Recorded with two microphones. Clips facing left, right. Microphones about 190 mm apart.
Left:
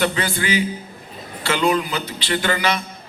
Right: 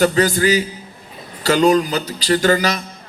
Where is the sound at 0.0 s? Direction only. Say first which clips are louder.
Right 7 dB; 40° right (ahead or behind).